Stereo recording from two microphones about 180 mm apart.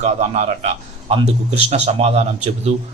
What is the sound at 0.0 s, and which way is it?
A man's voice, 40° right (ahead or behind).